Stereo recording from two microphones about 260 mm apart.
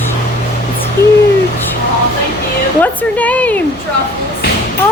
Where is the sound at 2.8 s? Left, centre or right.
Centre.